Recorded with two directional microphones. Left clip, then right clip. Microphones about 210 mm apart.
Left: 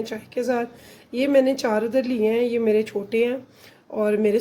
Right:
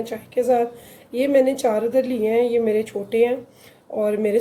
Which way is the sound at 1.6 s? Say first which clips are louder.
Right 3 dB; 40° left (ahead or behind).